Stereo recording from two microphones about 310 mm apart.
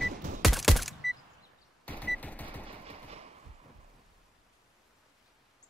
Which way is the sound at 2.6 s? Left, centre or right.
Centre.